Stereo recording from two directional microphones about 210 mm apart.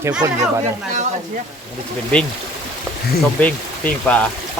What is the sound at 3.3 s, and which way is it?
Speech, 5° left (ahead or behind).